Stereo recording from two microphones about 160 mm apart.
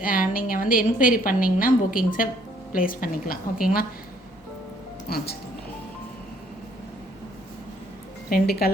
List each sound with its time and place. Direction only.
0.0 s a woman's voice: 60° left (ahead or behind)
5.0 s speech: 75° left (ahead or behind)
8.3 s a woman's voice: 70° left (ahead or behind)